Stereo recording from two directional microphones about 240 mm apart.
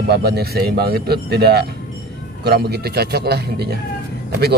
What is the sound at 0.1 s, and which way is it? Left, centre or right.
Speech, right.